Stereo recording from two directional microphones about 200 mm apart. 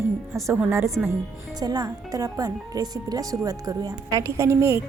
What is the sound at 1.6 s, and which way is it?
Speech, 20° right (ahead or behind).